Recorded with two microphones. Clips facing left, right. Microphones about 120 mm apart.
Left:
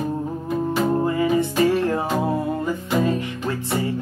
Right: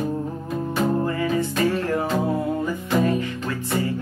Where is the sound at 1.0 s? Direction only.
20° left (ahead or behind).